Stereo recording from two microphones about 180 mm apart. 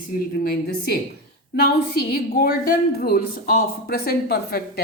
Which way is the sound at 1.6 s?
60° left (ahead or behind).